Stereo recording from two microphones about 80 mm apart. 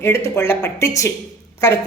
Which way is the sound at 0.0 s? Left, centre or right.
Left.